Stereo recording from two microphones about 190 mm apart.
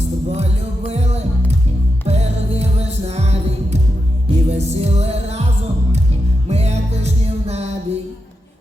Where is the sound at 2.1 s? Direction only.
35° right (ahead or behind).